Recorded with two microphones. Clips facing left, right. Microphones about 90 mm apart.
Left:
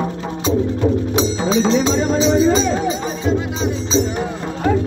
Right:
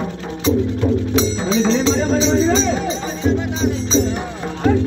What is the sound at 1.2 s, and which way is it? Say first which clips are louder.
Music: left 1 dB; 15° left (ahead or behind).